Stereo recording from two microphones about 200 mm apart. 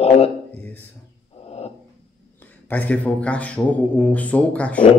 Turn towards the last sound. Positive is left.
turn(degrees=5)  # may be behind; listen again after turning